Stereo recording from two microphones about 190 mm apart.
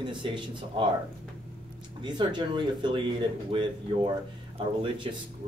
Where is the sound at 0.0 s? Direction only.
25° right (ahead or behind).